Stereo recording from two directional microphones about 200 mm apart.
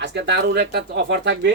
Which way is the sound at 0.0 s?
60° right (ahead or behind).